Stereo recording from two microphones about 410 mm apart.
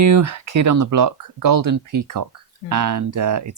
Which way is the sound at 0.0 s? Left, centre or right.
Right.